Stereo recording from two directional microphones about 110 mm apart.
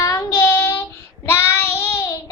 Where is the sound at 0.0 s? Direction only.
35° left (ahead or behind).